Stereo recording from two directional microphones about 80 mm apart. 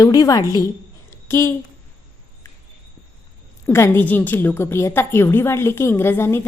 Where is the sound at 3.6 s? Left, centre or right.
Left.